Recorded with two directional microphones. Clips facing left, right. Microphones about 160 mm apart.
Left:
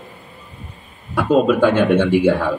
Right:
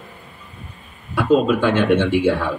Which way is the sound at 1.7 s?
45° left (ahead or behind).